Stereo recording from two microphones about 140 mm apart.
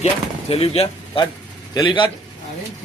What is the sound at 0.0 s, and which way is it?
Speech, 45° left (ahead or behind).